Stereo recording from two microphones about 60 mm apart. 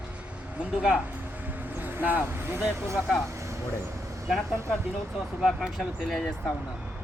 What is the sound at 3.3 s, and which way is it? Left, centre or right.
Vehicle, right.